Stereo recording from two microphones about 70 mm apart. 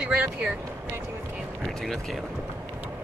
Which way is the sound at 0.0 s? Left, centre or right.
Centre.